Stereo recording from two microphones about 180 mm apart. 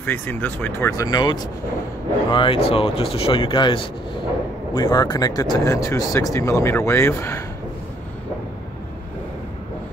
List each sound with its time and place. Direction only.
0.0 s speech: 10° left (ahead or behind)